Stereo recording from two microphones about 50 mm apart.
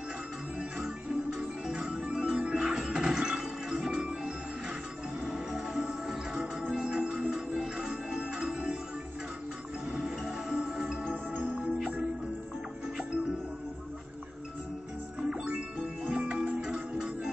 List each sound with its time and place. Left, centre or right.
0.6 s music: centre
5.9 s music: centre
9.8 s music: centre
15.1 s music: centre